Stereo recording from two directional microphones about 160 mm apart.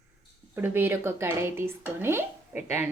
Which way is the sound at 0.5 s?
10° right (ahead or behind).